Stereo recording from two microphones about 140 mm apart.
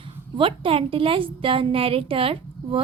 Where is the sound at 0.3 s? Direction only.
40° right (ahead or behind).